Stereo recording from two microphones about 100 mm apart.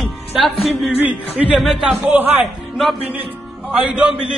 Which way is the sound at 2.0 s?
20° right (ahead or behind).